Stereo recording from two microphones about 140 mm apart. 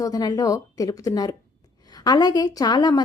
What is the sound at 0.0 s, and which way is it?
A woman's voice, 30° left (ahead or behind).